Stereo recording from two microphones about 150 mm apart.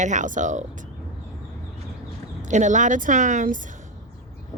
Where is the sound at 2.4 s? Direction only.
55° right (ahead or behind).